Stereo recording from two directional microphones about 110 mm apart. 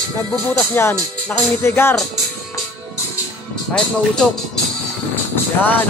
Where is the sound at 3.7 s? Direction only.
5° left (ahead or behind).